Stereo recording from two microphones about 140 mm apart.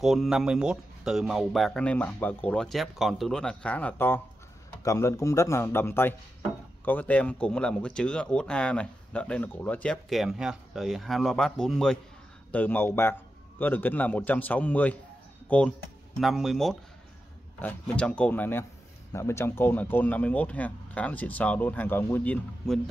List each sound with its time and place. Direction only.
0.0 s a man's voice: centre (ahead or behind)
10.0 s speech: centre (ahead or behind)
16.2 s speech: centre (ahead or behind)